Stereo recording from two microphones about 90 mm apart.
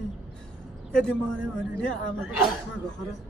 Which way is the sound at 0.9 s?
10° left (ahead or behind).